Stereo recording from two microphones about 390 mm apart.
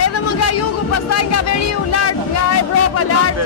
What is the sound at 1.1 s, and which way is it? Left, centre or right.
Speech, left.